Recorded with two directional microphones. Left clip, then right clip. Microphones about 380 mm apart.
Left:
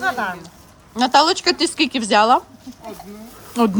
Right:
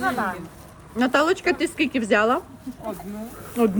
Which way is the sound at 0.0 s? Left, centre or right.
Left.